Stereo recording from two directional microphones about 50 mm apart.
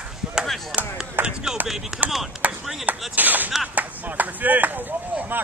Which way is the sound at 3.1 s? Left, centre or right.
Right.